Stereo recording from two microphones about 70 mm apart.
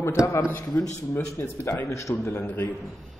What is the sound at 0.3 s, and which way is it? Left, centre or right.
A man's voice, left.